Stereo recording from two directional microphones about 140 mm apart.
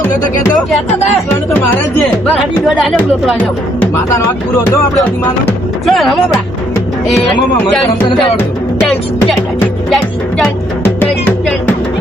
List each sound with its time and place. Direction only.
2.3 s speech: centre (ahead or behind)
5.8 s speech: centre (ahead or behind)
9.9 s speech: 5° left (ahead or behind)
10.8 s music: 15° left (ahead or behind)